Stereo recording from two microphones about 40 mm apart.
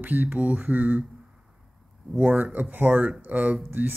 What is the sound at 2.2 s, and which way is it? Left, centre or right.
Speech, right.